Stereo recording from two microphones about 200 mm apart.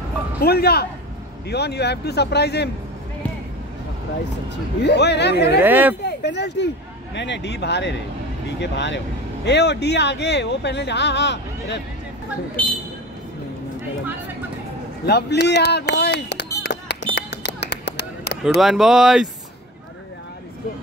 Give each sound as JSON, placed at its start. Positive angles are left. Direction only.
{"t": 0.4, "sound": "speech", "side_deg": 50}
{"t": 4.8, "sound": "speech", "side_deg": 60}
{"t": 5.6, "sound": "speech", "side_deg": -10}
{"t": 6.0, "sound": "speech", "side_deg": 60}
{"t": 15.0, "sound": "speech", "side_deg": 55}
{"t": 17.1, "sound": "a sound", "side_deg": 60}
{"t": 18.4, "sound": "speech", "side_deg": 0}